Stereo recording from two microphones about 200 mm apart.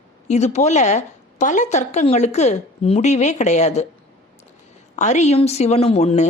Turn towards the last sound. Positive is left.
turn(degrees=35)  # may be behind; listen again after turning